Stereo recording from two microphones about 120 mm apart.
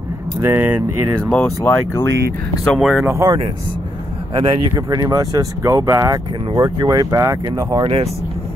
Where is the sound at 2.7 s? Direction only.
5° right (ahead or behind).